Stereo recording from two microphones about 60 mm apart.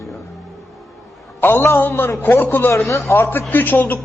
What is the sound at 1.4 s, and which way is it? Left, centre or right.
A man's voice, left.